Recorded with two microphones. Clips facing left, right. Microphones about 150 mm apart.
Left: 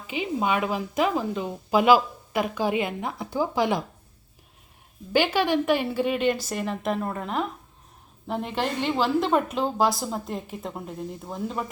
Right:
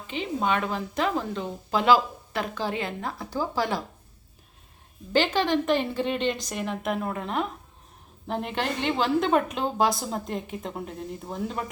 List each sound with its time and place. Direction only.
0.1 s a woman's voice: 10° left (ahead or behind)
5.1 s a woman's voice: 10° left (ahead or behind)